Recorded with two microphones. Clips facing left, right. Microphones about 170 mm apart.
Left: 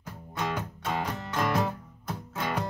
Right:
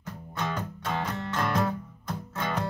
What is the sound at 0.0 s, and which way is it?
Music, 10° left (ahead or behind).